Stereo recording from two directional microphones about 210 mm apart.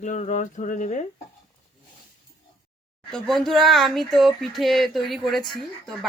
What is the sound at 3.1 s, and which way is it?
Speech, centre (ahead or behind).